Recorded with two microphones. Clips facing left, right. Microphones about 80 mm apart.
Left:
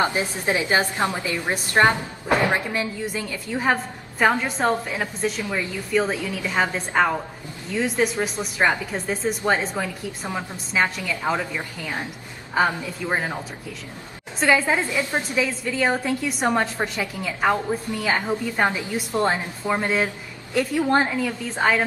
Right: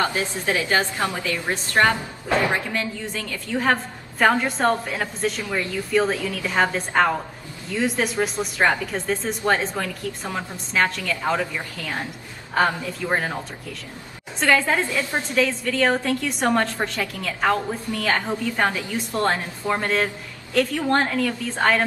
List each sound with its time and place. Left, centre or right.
0.0 s a woman's voice: left
14.4 s a woman's voice: centre